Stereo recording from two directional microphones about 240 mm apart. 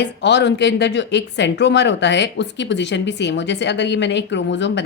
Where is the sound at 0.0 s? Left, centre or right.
Left.